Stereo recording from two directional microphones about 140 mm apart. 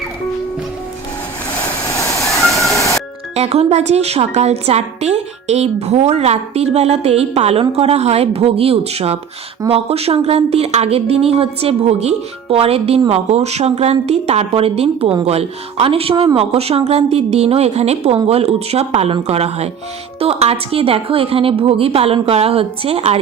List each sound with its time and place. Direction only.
1.9 s train: 25° left (ahead or behind)
2.6 s music: 20° left (ahead or behind)
3.3 s a woman's voice: 50° right (ahead or behind)